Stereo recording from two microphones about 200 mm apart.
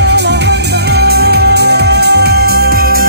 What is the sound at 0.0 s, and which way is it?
Music, 55° right (ahead or behind).